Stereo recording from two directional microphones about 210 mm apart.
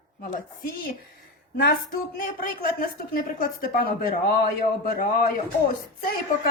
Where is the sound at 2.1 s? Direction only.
45° left (ahead or behind).